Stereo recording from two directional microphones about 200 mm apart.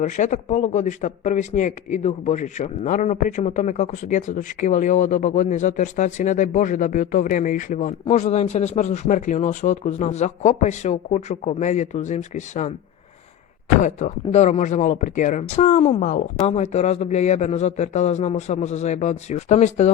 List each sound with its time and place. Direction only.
0.0 s speech: 35° left (ahead or behind)
13.8 s speech: 35° left (ahead or behind)